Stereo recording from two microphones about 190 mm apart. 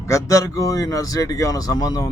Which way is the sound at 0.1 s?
15° left (ahead or behind).